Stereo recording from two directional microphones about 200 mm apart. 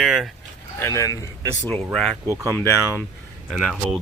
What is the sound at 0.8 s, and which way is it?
Speech, 15° left (ahead or behind).